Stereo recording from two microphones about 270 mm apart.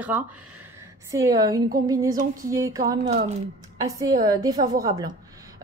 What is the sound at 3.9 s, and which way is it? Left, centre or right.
A woman's voice, centre.